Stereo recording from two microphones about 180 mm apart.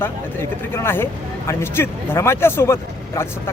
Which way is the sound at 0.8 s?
15° left (ahead or behind).